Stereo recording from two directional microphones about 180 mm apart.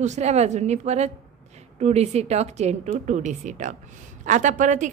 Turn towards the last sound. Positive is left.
turn(degrees=-45)  # may be behind; listen again after turning